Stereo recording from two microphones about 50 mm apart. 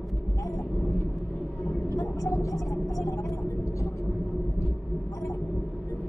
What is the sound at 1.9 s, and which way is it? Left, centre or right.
Vehicle, left.